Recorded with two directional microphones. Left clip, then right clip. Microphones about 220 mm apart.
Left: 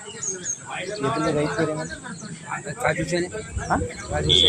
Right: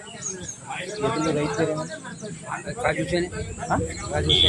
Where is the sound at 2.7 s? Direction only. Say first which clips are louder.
Left 1 dB; 20° left (ahead or behind).